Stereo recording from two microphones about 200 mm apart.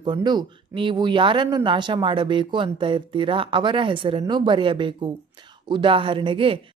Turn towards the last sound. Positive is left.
turn(degrees=-25)  # may be behind; listen again after turning